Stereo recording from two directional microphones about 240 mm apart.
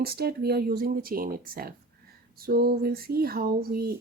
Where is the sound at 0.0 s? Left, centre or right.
Right.